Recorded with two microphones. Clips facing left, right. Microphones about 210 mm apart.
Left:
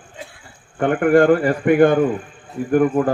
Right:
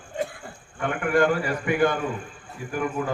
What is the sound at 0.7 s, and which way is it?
A man's voice, 50° left (ahead or behind).